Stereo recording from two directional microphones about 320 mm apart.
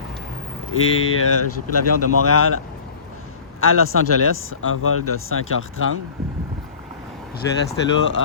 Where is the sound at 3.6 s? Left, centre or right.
Left.